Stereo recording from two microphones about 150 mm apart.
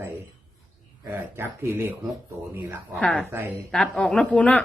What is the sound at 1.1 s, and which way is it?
Speech, 15° right (ahead or behind).